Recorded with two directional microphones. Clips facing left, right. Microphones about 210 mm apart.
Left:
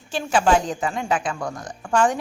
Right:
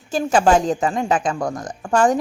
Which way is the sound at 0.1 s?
40° right (ahead or behind).